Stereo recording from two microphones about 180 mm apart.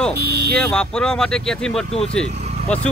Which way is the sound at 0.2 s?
60° right (ahead or behind).